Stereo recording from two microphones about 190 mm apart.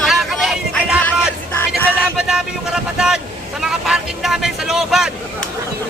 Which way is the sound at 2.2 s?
5° right (ahead or behind).